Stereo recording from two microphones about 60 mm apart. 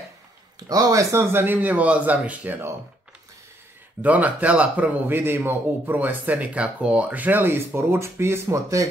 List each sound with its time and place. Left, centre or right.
0.6 s speech: right
1.1 s speech: right
4.0 s a man's voice: right